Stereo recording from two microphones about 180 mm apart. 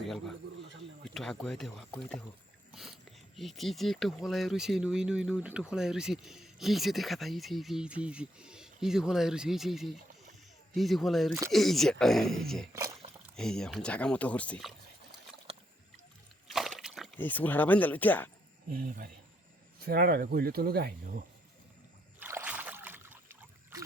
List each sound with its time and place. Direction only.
0.0 s a man's voice: centre (ahead or behind)
3.3 s speech: centre (ahead or behind)
12.7 s speech: 15° right (ahead or behind)
13.3 s speech: 5° left (ahead or behind)
16.5 s slosh: centre (ahead or behind)
17.2 s speech: 10° left (ahead or behind)
18.7 s speech: 55° right (ahead or behind)
22.2 s rowboat: 10° right (ahead or behind)